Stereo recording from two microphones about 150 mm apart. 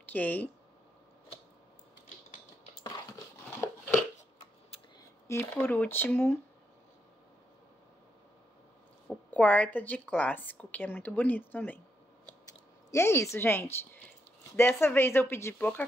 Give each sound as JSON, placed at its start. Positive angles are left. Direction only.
{"t": 0.1, "sound": "a woman's voice", "side_deg": 10}
{"t": 2.8, "sound": "dog", "side_deg": 25}
{"t": 3.4, "sound": "a sound", "side_deg": 15}
{"t": 5.3, "sound": "a woman's voice", "side_deg": 15}
{"t": 9.3, "sound": "a woman's voice", "side_deg": 10}
{"t": 12.9, "sound": "a woman's voice", "side_deg": 20}